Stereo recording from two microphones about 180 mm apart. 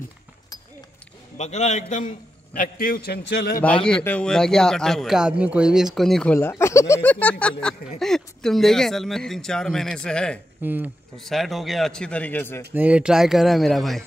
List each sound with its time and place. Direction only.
1.4 s a man's voice: 40° left (ahead or behind); by 3.6 s 60° left (ahead or behind)
3.6 s speech: 5° left (ahead or behind)
6.5 s speech: 15° left (ahead or behind)
10.6 s speech: 10° right (ahead or behind)
11.1 s speech: centre (ahead or behind)
12.7 s speech: 10° right (ahead or behind)